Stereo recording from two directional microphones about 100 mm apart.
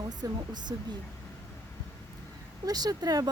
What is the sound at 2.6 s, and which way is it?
Speech, 40° right (ahead or behind).